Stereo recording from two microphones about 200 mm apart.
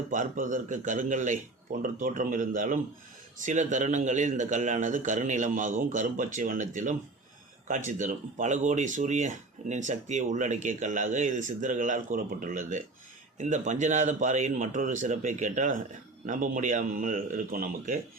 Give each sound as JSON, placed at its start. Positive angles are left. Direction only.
{"t": 0.1, "sound": "speech", "side_deg": -40}